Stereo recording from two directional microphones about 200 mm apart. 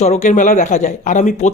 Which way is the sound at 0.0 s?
35° left (ahead or behind).